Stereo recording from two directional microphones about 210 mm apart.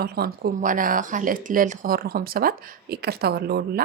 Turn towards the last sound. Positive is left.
turn(degrees=-45)  # may be behind; listen again after turning